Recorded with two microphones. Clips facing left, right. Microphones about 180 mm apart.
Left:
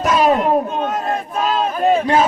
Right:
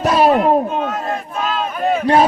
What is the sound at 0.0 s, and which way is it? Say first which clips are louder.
Children playing: right 2 dB; 35° right (ahead or behind).